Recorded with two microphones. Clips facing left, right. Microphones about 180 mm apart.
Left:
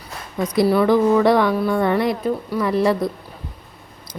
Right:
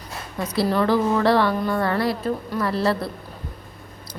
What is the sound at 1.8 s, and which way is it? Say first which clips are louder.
A woman's voice: left 4 dB; 20° left (ahead or behind).